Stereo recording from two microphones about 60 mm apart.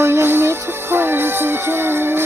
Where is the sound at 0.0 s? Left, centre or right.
Right.